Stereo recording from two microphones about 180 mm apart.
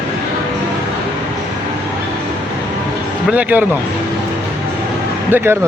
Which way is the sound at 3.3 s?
10° right (ahead or behind).